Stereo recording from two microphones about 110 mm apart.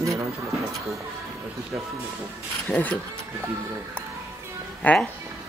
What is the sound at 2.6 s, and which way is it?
Speech, 10° left (ahead or behind).